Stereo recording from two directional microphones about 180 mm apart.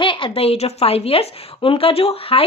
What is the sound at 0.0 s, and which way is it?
Speech, 30° left (ahead or behind).